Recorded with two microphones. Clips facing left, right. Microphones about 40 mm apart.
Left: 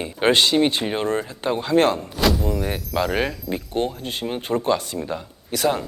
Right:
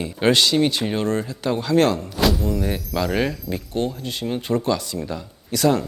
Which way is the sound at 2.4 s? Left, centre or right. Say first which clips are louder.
Right 1 dB; centre.